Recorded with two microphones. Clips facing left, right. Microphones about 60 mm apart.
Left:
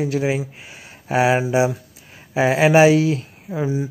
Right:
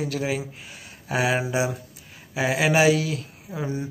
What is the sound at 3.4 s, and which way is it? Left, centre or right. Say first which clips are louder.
Speech: left 7 dB; centre.